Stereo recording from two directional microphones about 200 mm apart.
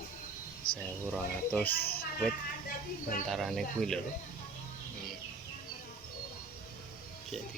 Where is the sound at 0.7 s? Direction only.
25° left (ahead or behind).